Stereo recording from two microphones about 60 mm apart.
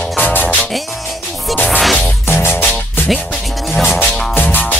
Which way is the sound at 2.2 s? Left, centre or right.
Left.